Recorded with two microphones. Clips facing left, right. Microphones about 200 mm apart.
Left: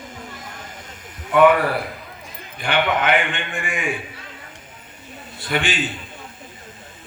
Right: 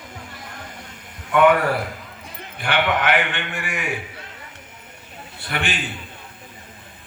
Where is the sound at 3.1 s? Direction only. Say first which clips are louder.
Left 1 dB; 65° right (ahead or behind).